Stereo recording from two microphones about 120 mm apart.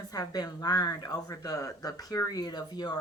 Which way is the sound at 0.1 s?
30° left (ahead or behind).